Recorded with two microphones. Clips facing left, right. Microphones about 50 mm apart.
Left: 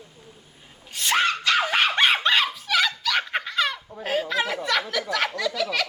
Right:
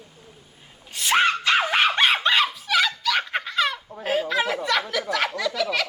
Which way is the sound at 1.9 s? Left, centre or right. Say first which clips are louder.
Even; centre.